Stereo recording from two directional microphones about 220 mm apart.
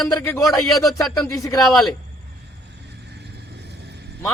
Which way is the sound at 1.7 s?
Centre (ahead or behind).